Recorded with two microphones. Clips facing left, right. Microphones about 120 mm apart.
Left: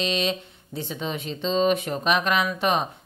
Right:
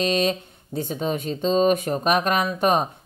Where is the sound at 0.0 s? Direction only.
45° right (ahead or behind).